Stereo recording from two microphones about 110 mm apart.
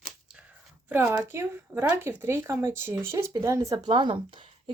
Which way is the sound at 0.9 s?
20° right (ahead or behind).